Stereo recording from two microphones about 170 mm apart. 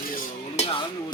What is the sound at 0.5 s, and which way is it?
Music, 35° left (ahead or behind).